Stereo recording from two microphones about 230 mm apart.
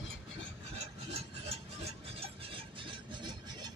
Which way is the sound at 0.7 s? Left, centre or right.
Right.